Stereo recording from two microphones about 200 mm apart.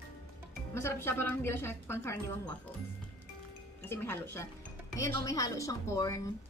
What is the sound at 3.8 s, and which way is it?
A woman's voice, 10° left (ahead or behind).